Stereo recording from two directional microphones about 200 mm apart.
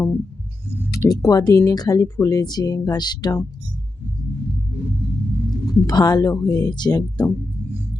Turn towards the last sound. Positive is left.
turn(degrees=20)  # may be behind; listen again after turning